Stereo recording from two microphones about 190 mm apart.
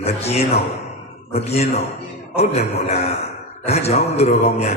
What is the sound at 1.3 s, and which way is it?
Mantra, 35° left (ahead or behind).